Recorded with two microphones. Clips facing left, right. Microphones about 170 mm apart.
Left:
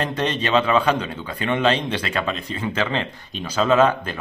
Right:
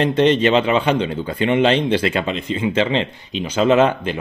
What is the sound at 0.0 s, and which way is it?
Speech, 30° right (ahead or behind).